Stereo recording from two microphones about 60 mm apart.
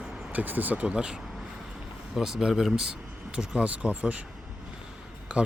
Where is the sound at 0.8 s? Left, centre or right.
Centre.